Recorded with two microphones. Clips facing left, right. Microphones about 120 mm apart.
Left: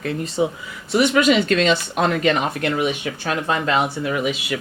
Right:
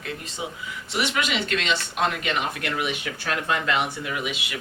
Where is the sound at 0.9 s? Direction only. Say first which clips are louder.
Left 10 dB; 40° left (ahead or behind).